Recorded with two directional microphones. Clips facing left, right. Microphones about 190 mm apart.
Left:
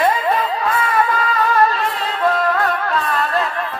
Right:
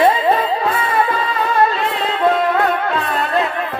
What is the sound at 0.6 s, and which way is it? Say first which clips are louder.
Music: right 1 dB; 30° right (ahead or behind).